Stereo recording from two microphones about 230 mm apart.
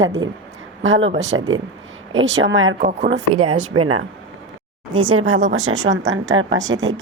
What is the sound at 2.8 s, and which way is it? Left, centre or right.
Speech, right.